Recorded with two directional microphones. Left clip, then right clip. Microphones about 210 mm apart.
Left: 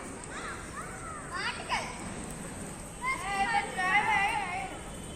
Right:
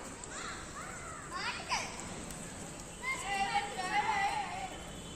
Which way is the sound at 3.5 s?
20° left (ahead or behind).